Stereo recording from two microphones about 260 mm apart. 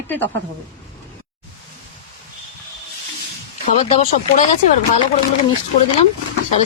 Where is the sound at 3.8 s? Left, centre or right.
Left.